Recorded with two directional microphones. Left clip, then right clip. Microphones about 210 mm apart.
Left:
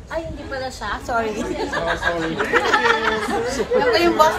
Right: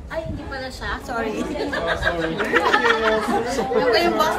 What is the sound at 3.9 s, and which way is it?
Speech, 15° left (ahead or behind).